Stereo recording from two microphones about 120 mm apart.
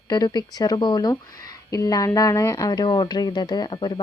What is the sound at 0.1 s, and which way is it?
Speech, 35° left (ahead or behind).